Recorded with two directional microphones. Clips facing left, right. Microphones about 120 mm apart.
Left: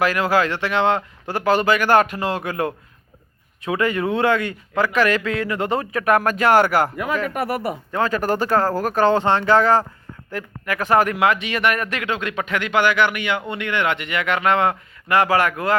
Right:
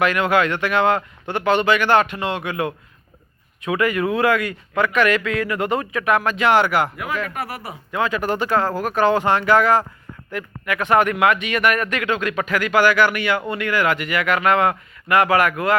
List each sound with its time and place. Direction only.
0.0 s a man's voice: 35° left (ahead or behind)
3.6 s a man's voice: 30° left (ahead or behind)